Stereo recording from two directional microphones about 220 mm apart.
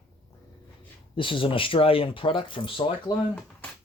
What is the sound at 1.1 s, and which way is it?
Speech, 25° left (ahead or behind).